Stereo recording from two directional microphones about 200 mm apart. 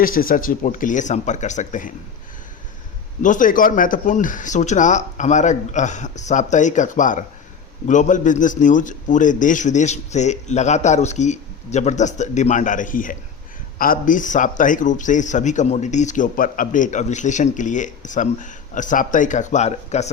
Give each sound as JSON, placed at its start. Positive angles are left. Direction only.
{"t": 0.0, "sound": "speech", "side_deg": 45}
{"t": 3.2, "sound": "speech", "side_deg": 40}